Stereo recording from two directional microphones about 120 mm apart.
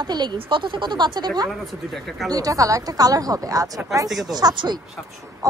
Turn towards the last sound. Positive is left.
turn(degrees=-30)  # may be behind; listen again after turning